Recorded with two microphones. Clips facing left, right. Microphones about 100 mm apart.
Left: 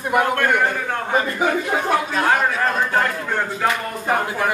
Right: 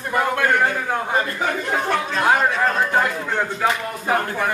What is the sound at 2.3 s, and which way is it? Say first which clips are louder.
Music: right 1 dB; centre (ahead or behind).